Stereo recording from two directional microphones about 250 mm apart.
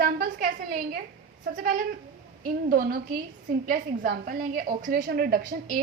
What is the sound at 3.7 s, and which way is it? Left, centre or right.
A woman's voice, right.